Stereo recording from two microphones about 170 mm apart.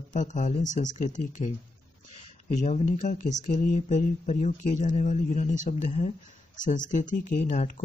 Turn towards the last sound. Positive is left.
turn(degrees=45)  # may be behind; listen again after turning